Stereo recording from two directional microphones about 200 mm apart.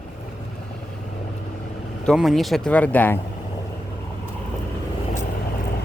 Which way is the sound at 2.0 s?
Centre (ahead or behind).